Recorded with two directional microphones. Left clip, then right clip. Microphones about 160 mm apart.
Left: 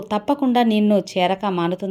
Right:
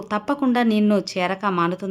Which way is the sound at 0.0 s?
10° left (ahead or behind).